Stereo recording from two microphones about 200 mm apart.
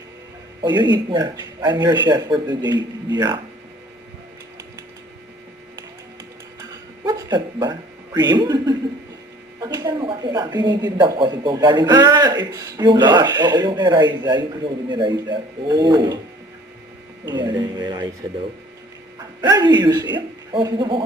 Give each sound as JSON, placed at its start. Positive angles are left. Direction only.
{"t": 0.6, "sound": "a woman's voice", "side_deg": -20}
{"t": 7.0, "sound": "a woman's voice", "side_deg": -20}
{"t": 17.2, "sound": "a woman's voice", "side_deg": -20}
{"t": 19.4, "sound": "a woman's voice", "side_deg": -20}